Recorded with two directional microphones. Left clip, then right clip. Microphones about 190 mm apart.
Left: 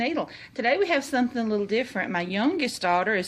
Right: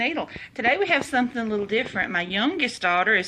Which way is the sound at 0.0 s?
35° left (ahead or behind).